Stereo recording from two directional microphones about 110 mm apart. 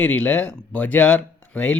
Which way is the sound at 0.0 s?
15° left (ahead or behind).